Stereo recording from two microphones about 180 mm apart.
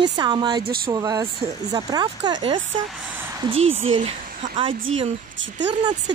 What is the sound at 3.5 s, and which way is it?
Speech, 90° right.